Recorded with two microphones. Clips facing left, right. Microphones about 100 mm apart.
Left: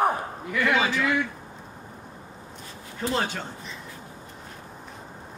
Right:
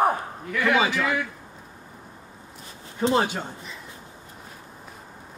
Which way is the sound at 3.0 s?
20° right (ahead or behind).